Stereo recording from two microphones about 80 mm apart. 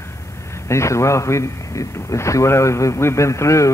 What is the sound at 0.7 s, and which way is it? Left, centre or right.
A man's voice, left.